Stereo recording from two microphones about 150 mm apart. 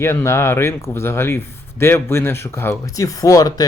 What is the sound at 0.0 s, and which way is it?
Speech, 15° left (ahead or behind).